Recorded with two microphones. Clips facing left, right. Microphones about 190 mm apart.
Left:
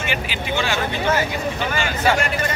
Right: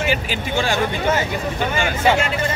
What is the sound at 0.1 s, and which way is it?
Speech, 45° right (ahead or behind).